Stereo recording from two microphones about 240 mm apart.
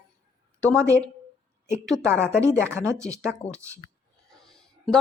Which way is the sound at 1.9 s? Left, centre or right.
Centre.